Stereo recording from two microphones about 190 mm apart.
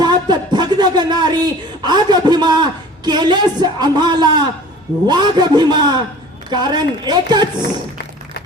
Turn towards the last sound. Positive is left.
turn(degrees=-25)  # may be behind; listen again after turning